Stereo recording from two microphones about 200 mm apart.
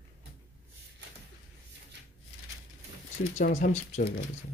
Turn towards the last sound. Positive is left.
turn(degrees=35)  # may be behind; listen again after turning